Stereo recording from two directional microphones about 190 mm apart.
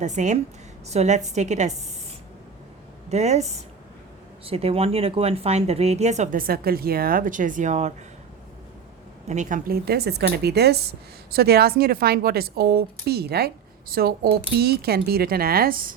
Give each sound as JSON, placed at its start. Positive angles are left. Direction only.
{"t": 0.0, "sound": "speech", "side_deg": -40}
{"t": 3.1, "sound": "speech", "side_deg": -35}
{"t": 9.2, "sound": "speech", "side_deg": -40}